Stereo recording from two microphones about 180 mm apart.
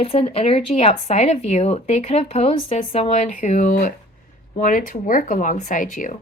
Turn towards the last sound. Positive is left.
turn(degrees=45)  # may be behind; listen again after turning